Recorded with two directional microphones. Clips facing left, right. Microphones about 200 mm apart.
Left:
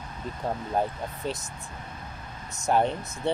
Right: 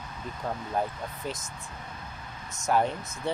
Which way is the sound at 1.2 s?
30° left (ahead or behind).